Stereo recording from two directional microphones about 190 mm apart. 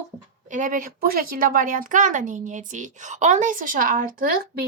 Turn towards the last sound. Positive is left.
turn(degrees=-50)  # may be behind; listen again after turning